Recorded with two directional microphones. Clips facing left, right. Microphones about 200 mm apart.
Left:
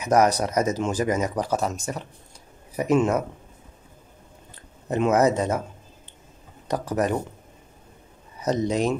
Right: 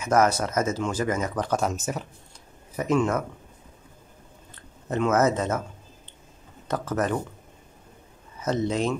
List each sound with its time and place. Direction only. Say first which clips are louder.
0.0 s speech: left 2 dB; 15° left (ahead or behind); by 2.0 s 5° right (ahead or behind)
2.7 s speech: left 3 dB; 15° left (ahead or behind)
4.8 s speech: left 2 dB; 15° left (ahead or behind)
6.7 s speech: left 2 dB; 15° left (ahead or behind)
8.4 s speech: left 2 dB; 15° left (ahead or behind)